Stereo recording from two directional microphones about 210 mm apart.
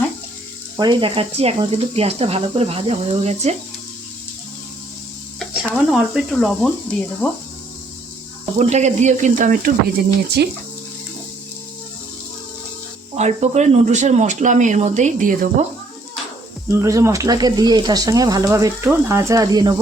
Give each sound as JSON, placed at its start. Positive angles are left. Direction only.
{"t": 0.8, "sound": "speech", "side_deg": -20}
{"t": 5.4, "sound": "speech", "side_deg": 0}
{"t": 8.5, "sound": "speech", "side_deg": -30}
{"t": 13.1, "sound": "speech", "side_deg": -30}
{"t": 16.6, "sound": "speech", "side_deg": -15}